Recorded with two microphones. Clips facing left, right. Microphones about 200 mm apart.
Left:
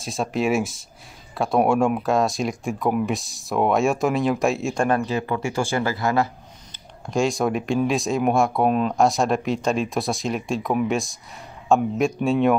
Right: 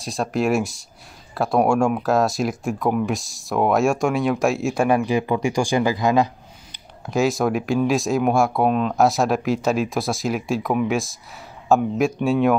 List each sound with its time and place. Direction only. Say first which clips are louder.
0.0 s speech: right 1 dB; centre (ahead or behind)
4.8 s speech: right 4 dB; 15° right (ahead or behind)
7.1 s speech: right 2 dB; 5° right (ahead or behind)